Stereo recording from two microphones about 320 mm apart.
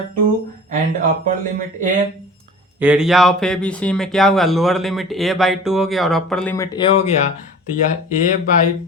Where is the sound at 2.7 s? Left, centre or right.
Centre.